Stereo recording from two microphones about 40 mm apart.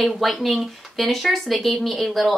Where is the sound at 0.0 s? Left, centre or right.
Centre.